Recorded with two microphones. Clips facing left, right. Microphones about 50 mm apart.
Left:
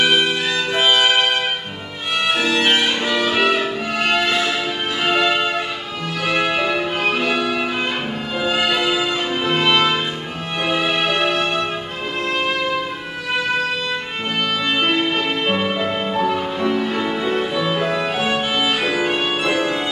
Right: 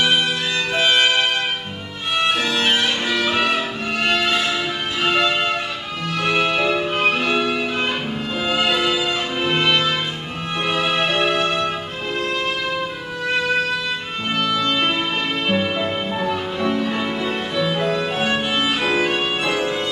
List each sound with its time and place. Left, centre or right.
0.0 s music: centre
2.2 s music: centre
10.7 s music: centre
14.6 s music: centre